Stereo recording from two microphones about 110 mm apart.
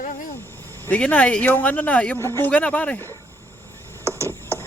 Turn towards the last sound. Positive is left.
turn(degrees=20)  # may be behind; listen again after turning